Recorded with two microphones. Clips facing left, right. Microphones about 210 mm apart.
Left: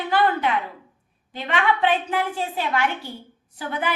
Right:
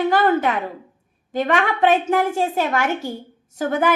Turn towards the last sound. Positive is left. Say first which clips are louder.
# right 8 dB
turn(degrees=-45)  # may be behind; listen again after turning